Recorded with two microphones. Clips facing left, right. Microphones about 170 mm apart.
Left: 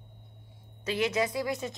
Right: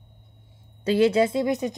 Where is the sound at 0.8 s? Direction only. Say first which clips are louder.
Right 9 dB; 30° right (ahead or behind).